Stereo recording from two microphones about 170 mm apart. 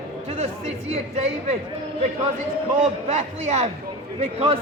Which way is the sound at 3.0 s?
40° right (ahead or behind).